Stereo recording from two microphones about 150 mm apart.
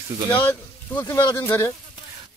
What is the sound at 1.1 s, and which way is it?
Speech, 20° left (ahead or behind).